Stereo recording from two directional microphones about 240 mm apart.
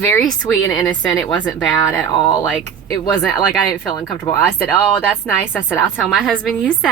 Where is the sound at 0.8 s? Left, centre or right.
Centre.